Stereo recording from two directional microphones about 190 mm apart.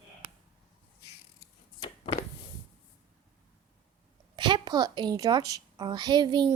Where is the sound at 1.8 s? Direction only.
30° left (ahead or behind).